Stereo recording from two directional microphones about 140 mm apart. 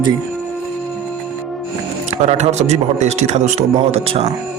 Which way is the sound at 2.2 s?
55° right (ahead or behind).